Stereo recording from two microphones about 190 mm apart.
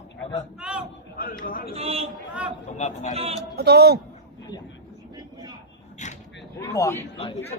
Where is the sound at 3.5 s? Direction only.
60° right (ahead or behind).